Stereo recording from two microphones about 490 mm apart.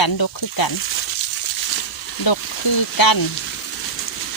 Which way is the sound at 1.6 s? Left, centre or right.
Left.